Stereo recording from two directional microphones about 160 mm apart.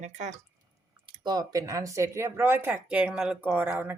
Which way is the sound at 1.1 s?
25° right (ahead or behind).